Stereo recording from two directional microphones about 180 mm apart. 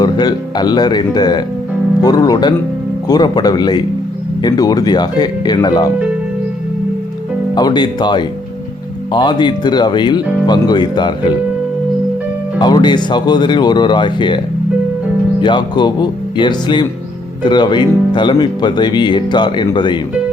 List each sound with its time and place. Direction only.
0.0 s speech: 25° left (ahead or behind)
7.5 s speech: 25° left (ahead or behind)
12.5 s speech: 25° left (ahead or behind)